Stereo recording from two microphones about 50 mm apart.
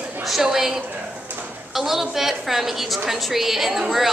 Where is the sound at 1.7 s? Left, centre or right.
Centre.